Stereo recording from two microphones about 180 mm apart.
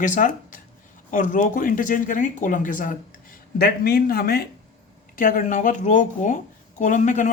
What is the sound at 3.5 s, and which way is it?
Speech, 60° left (ahead or behind).